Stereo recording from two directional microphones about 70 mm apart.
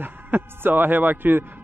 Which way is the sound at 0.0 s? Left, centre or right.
Right.